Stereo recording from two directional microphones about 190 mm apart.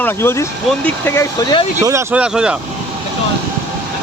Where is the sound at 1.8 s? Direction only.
15° right (ahead or behind).